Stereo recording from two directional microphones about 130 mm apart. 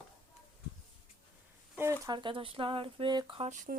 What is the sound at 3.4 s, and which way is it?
Speech, 75° right (ahead or behind).